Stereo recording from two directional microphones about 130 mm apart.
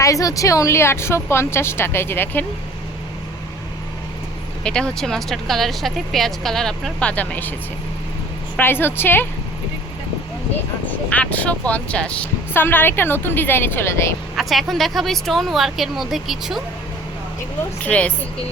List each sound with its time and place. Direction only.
0.0 s speech: 25° left (ahead or behind)
4.6 s speech: 5° left (ahead or behind)
8.5 s speech: 15° left (ahead or behind)
10.8 s speech: 10° left (ahead or behind)
14.3 s speech: centre (ahead or behind)
17.8 s speech: 10° left (ahead or behind)